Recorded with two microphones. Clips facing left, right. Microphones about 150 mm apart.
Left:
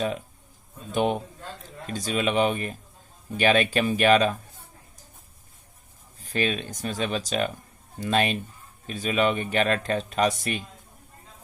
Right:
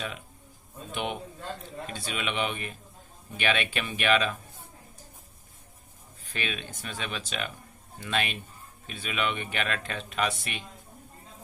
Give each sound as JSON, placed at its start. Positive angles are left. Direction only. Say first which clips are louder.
{"t": 0.9, "sound": "speech", "louder": "left 9 dB", "side_deg": 40}
{"t": 6.1, "sound": "speech", "louder": "left 9 dB", "side_deg": 40}